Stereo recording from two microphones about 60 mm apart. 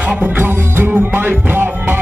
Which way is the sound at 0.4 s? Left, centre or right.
Right.